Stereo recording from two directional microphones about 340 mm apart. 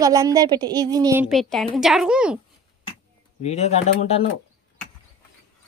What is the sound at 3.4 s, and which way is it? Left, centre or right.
Speech, centre.